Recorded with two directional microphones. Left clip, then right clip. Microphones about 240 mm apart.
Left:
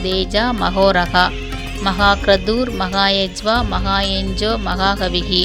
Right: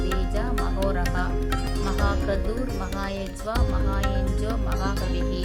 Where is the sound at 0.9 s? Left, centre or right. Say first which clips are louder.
Left 14 dB; left.